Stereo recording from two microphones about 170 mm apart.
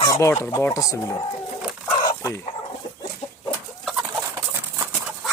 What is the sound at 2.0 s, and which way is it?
Chicken, 25° left (ahead or behind).